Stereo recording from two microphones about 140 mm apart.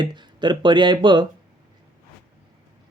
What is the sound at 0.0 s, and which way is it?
Speech, 30° right (ahead or behind).